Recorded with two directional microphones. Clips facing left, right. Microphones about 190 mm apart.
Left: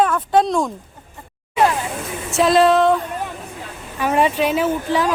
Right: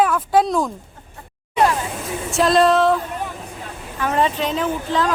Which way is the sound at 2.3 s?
Centre (ahead or behind).